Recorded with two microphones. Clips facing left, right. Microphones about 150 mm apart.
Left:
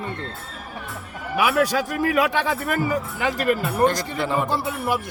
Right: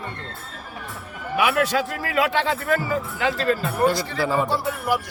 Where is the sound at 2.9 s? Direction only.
15° left (ahead or behind).